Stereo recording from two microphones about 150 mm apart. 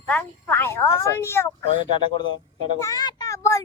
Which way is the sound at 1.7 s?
30° left (ahead or behind).